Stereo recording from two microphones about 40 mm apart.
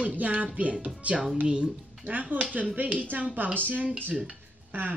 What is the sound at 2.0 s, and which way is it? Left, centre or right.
A woman's voice, right.